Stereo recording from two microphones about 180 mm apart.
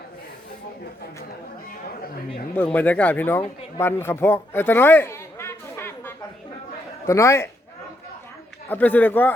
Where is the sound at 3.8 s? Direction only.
15° left (ahead or behind).